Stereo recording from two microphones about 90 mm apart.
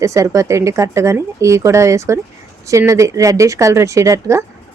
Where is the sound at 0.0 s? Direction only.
35° right (ahead or behind).